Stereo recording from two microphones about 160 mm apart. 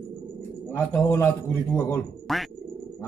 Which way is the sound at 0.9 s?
15° left (ahead or behind).